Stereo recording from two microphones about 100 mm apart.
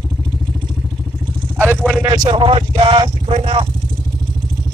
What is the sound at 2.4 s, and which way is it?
Speech, 60° right (ahead or behind).